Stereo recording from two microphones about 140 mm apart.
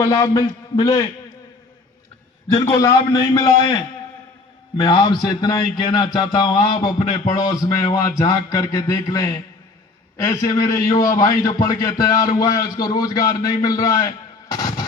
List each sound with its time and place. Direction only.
0.0 s a man's voice: 25° left (ahead or behind)
2.5 s a man's voice: 25° left (ahead or behind)
4.8 s a man's voice: 30° left (ahead or behind)